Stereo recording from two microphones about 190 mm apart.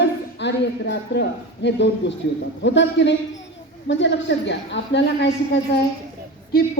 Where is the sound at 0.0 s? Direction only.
65° left (ahead or behind).